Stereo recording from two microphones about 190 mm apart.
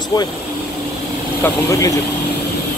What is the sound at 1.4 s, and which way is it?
Speech, 15° left (ahead or behind).